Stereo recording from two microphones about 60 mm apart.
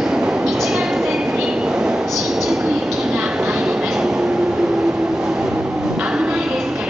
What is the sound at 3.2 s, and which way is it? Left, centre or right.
Train, centre.